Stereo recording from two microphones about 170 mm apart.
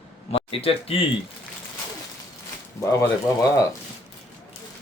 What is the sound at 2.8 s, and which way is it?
Speech, 15° left (ahead or behind).